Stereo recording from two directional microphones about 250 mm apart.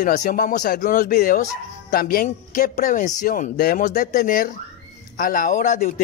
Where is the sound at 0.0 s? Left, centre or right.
Left.